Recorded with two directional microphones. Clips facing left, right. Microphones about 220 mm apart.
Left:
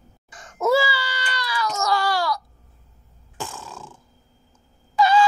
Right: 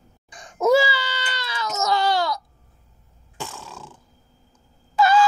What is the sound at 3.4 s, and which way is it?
Burping, centre (ahead or behind).